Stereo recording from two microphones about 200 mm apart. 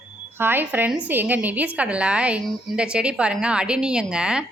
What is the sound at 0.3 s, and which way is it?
A woman's voice, 10° right (ahead or behind).